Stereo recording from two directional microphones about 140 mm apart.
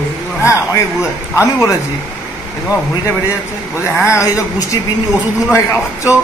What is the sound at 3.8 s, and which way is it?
Speech, 20° left (ahead or behind).